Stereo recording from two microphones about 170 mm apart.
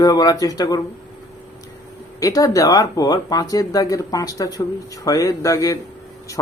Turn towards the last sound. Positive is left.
turn(degrees=20)  # may be behind; listen again after turning